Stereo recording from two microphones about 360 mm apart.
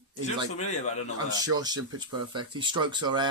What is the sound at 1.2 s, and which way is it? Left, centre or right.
Speech, centre.